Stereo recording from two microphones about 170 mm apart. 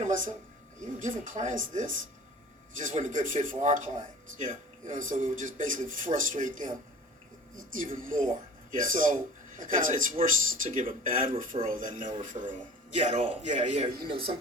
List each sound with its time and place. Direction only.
0.0 s a sound: 45° right (ahead or behind)
0.8 s speech: 50° right (ahead or behind)
13.0 s a man's voice: 35° right (ahead or behind)